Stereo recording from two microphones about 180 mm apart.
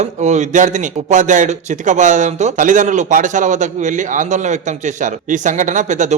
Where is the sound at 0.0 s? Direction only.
40° right (ahead or behind).